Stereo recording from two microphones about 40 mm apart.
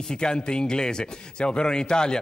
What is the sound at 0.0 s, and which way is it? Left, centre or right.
A man's voice, centre.